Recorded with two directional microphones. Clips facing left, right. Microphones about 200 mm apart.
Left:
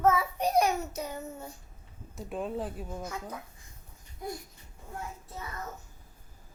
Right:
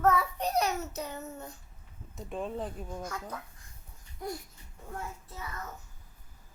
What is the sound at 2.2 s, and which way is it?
Speech, 5° left (ahead or behind).